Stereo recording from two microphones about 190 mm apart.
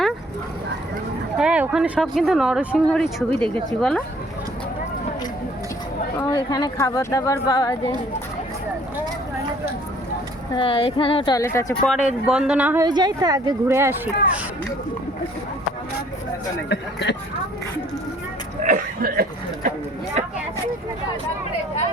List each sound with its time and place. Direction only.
1.4 s speech: 5° right (ahead or behind)
6.1 s speech: 20° left (ahead or behind)
10.5 s speech: 30° left (ahead or behind)
11.9 s speech: 5° right (ahead or behind)
12.8 s speech: 20° right (ahead or behind)
16.6 s speech: 65° left (ahead or behind)
18.6 s a sound: 45° right (ahead or behind)
20.2 s vehicle: 40° right (ahead or behind)